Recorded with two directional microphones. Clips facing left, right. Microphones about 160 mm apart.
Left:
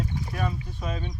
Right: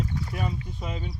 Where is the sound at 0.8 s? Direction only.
10° right (ahead or behind).